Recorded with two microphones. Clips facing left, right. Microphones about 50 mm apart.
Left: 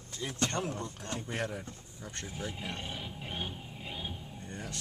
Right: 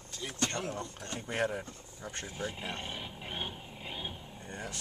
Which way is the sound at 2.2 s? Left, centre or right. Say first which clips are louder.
Right 1 dB; centre.